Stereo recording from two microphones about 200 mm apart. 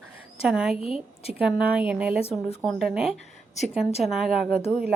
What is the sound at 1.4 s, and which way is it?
A woman's voice, 5° right (ahead or behind).